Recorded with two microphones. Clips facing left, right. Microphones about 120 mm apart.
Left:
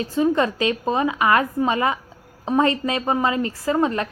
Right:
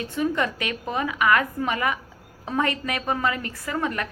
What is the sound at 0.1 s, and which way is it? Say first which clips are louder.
A woman's voice: left 6 dB; 25° left (ahead or behind).